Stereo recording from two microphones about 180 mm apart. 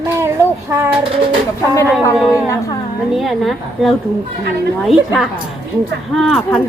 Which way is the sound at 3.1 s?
Centre (ahead or behind).